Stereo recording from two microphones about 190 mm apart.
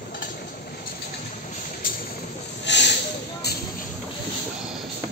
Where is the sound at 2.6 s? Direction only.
65° left (ahead or behind).